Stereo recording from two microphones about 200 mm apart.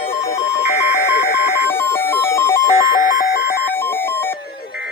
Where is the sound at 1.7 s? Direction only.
10° left (ahead or behind).